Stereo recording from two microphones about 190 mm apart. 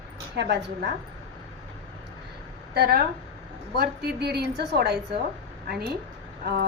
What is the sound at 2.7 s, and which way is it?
A woman's voice, 55° right (ahead or behind).